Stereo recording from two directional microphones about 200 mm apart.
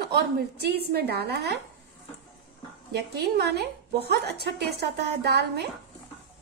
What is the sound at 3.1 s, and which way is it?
A woman's voice, 55° right (ahead or behind).